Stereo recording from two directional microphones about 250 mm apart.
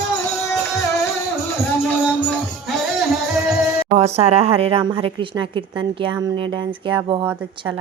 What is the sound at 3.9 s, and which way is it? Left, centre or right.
A woman's voice, right.